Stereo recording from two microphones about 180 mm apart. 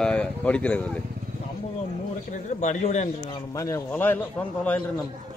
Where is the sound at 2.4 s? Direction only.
40° left (ahead or behind).